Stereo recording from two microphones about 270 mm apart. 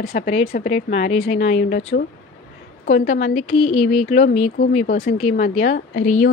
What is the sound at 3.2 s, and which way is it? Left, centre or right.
Speech, left.